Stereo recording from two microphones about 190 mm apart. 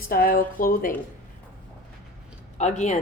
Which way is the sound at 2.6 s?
40° left (ahead or behind).